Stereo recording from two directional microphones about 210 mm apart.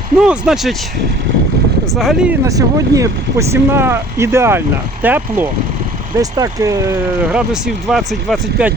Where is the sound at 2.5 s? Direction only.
15° right (ahead or behind).